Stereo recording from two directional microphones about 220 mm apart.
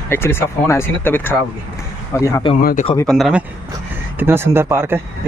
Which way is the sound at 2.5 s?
45° left (ahead or behind).